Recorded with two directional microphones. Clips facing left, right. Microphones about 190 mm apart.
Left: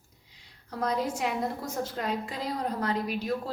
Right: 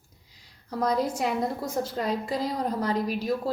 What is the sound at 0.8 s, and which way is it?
A woman's voice, 35° right (ahead or behind).